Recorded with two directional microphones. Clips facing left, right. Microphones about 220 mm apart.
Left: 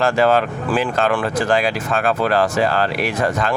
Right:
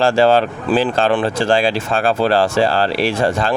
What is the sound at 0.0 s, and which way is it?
Speech, 30° right (ahead or behind).